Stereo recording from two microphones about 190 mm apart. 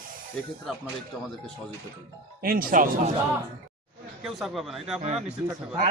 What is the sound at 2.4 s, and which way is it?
Speech, 50° right (ahead or behind).